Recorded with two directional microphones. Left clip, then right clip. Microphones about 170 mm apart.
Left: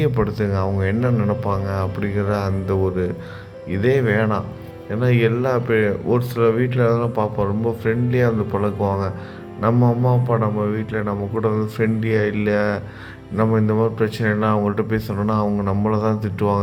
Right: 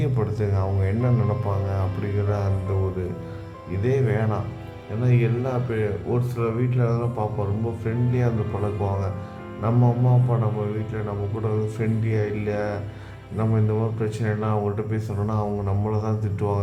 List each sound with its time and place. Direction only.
0.0 s a man's voice: 15° left (ahead or behind)
10.2 s a man's voice: 20° left (ahead or behind)